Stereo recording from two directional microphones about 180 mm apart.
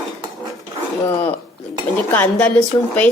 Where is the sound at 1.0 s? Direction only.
10° left (ahead or behind).